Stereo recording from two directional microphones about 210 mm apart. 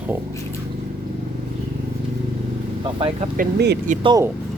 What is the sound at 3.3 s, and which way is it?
Speech, 45° right (ahead or behind).